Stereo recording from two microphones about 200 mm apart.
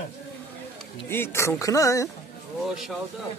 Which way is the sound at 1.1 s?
10° left (ahead or behind).